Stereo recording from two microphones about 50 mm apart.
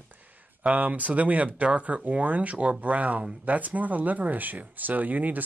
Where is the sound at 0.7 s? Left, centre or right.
Right.